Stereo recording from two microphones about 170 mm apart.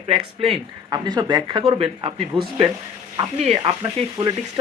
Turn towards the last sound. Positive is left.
turn(degrees=-20)  # may be behind; listen again after turning